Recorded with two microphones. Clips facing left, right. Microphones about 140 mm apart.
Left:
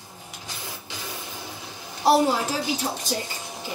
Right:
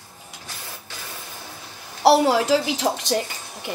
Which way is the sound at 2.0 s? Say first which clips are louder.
Right 4 dB; 90° right.